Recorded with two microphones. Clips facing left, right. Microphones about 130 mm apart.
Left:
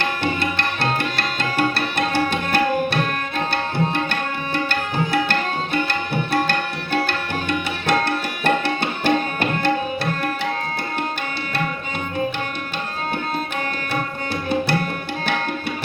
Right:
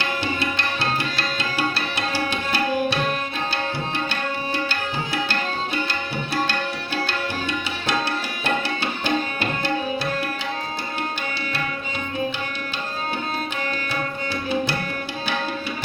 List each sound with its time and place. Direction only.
0.3 s music: 55° left (ahead or behind)
5.9 s tabla: 55° left (ahead or behind)